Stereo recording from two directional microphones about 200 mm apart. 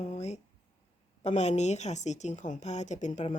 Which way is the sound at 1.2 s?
35° left (ahead or behind).